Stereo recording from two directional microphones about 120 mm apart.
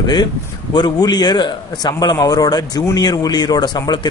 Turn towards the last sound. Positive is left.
turn(degrees=35)  # may be behind; listen again after turning